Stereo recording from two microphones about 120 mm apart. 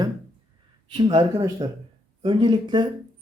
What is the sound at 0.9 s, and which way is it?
Speech, 45° right (ahead or behind).